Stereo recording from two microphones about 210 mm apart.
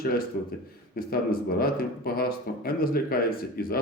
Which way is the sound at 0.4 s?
45° left (ahead or behind).